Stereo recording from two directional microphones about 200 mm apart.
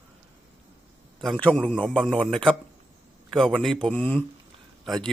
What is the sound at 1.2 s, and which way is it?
A man's voice, 5° left (ahead or behind).